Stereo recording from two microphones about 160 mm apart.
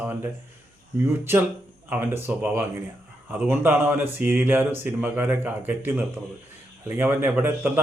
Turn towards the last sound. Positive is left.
turn(degrees=-10)  # may be behind; listen again after turning